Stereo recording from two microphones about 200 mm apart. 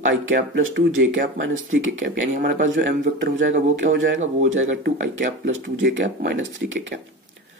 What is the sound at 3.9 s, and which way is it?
Speech, 70° right (ahead or behind).